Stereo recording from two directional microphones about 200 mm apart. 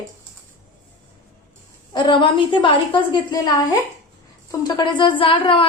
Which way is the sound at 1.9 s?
25° left (ahead or behind).